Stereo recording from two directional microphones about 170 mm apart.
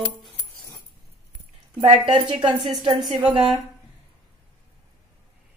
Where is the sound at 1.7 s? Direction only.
30° right (ahead or behind).